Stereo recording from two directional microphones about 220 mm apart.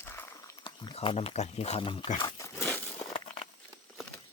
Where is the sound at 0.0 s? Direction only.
10° left (ahead or behind).